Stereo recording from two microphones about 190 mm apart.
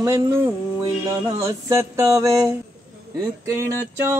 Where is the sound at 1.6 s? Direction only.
15° right (ahead or behind).